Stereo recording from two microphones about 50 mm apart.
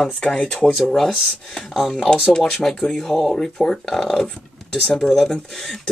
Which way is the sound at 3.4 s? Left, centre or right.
Centre.